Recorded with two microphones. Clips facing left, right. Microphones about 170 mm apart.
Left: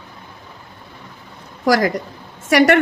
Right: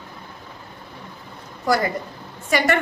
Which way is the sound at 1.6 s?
90° left.